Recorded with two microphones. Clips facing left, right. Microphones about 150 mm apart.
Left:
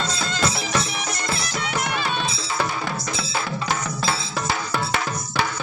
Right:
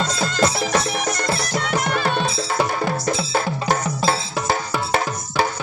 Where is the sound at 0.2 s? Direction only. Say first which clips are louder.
Right 6 dB; 45° right (ahead or behind).